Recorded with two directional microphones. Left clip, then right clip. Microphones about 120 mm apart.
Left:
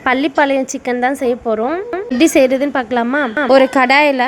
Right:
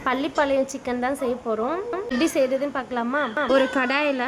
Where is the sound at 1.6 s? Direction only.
30° left (ahead or behind).